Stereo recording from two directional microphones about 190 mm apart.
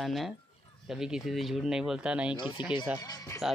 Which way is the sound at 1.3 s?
5° right (ahead or behind).